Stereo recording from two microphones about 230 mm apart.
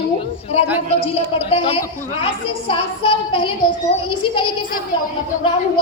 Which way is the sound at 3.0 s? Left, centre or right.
Left.